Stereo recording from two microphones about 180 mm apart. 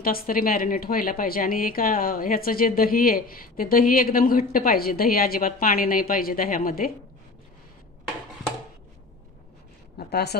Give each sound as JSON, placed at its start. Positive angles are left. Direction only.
{"t": 0.0, "sound": "a woman's voice", "side_deg": 55}
{"t": 9.9, "sound": "a woman's voice", "side_deg": 60}